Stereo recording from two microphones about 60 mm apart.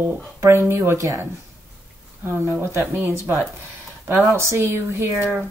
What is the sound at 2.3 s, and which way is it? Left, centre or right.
Speech, right.